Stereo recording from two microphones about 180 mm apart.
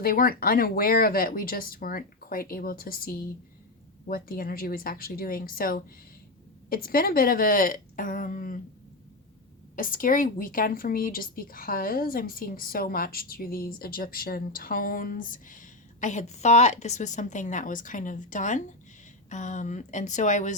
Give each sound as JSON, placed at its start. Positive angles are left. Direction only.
{"t": 0.0, "sound": "speech", "side_deg": 55}
{"t": 9.7, "sound": "speech", "side_deg": 50}